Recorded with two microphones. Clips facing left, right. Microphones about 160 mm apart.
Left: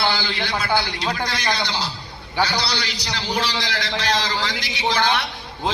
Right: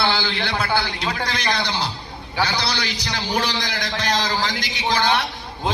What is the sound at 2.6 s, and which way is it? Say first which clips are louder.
A man's voice: right 1 dB; 50° right (ahead or behind).